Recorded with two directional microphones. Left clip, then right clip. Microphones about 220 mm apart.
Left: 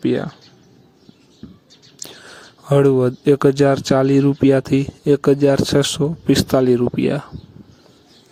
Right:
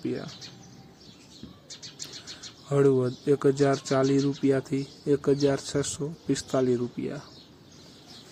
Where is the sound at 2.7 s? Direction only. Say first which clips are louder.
Left 9 dB; 40° left (ahead or behind).